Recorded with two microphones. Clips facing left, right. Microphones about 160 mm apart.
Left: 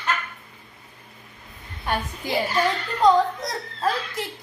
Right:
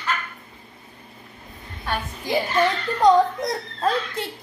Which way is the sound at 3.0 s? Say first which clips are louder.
Right 2 dB; 20° right (ahead or behind).